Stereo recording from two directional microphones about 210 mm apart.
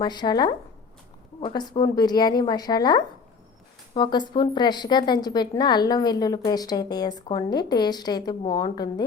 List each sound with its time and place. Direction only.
0.0 s a woman's voice: 20° left (ahead or behind)